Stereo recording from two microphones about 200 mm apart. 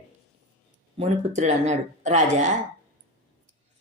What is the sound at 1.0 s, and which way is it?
A woman's voice, 35° right (ahead or behind).